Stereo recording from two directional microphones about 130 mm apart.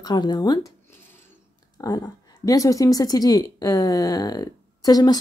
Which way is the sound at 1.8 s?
30° left (ahead or behind).